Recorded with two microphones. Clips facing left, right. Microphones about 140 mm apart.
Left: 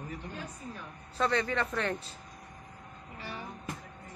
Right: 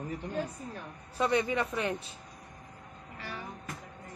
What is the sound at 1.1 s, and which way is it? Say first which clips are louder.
Speech: right 1 dB; 15° right (ahead or behind).